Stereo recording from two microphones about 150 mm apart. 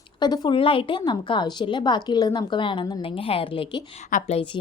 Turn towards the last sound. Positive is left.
turn(degrees=35)  # may be behind; listen again after turning